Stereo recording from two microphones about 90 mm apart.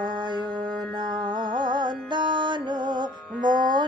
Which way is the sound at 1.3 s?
60° right (ahead or behind).